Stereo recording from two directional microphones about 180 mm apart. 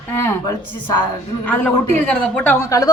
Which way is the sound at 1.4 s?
10° left (ahead or behind).